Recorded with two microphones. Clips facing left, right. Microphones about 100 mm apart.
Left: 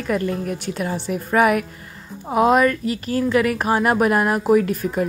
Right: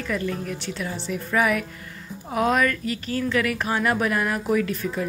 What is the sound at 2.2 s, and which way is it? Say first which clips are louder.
A woman's voice: left 6 dB; 35° left (ahead or behind).